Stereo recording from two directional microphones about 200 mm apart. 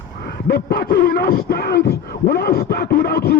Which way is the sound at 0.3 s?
50° left (ahead or behind).